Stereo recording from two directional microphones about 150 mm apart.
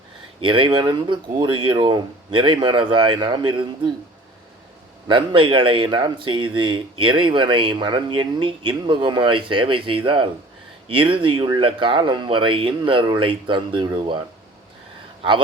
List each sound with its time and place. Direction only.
0.3 s speech: 35° right (ahead or behind)
5.0 s speech: 35° right (ahead or behind)